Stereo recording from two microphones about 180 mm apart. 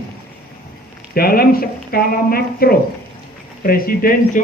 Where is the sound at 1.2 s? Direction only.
55° left (ahead or behind).